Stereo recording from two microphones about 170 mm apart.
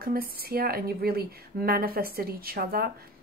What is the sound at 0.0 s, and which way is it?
A woman's voice, 60° right (ahead or behind).